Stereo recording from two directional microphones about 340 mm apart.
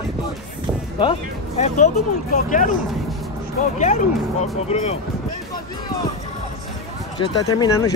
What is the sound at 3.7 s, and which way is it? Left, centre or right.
Speech, centre.